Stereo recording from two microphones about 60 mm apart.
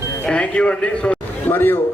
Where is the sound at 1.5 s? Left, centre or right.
Left.